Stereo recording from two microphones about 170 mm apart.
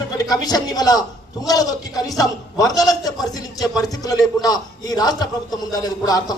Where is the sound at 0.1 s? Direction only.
20° left (ahead or behind).